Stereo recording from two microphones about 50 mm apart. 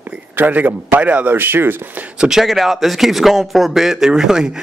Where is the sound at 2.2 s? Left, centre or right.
Centre.